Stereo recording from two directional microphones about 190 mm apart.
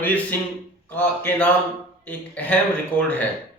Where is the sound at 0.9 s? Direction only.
5° left (ahead or behind).